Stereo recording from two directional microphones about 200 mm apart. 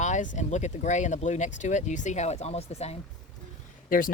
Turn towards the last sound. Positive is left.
turn(degrees=45)  # may be behind; listen again after turning